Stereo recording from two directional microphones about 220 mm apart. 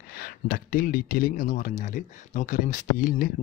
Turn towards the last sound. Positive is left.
turn(degrees=40)  # may be behind; listen again after turning